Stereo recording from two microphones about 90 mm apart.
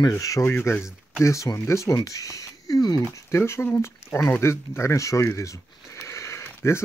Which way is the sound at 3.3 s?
30° left (ahead or behind).